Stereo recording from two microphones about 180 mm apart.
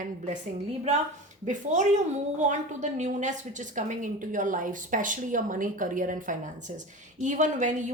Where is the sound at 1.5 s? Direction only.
40° right (ahead or behind).